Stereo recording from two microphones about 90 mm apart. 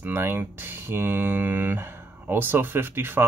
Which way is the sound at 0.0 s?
25° right (ahead or behind).